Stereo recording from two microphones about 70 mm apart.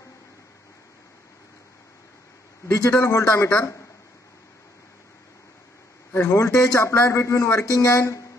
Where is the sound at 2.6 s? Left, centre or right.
Left.